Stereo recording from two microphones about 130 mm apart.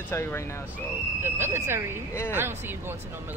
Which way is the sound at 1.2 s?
20° right (ahead or behind).